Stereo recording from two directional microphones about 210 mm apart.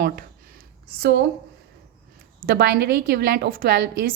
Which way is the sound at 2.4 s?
45° right (ahead or behind).